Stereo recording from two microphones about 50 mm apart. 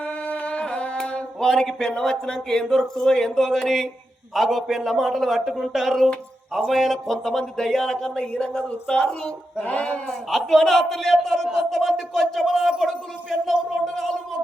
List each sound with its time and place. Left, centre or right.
0.0 s a sound: left
1.4 s speech: centre
9.6 s speech: left
10.1 s speech: centre